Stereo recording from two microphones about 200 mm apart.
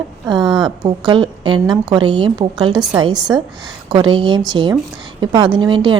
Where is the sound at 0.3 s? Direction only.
20° right (ahead or behind).